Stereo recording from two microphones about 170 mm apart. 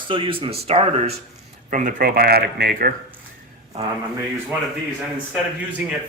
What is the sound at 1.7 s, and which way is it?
Speech, 50° right (ahead or behind).